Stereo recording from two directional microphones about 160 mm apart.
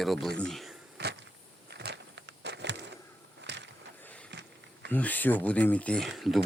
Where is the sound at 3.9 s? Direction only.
10° left (ahead or behind).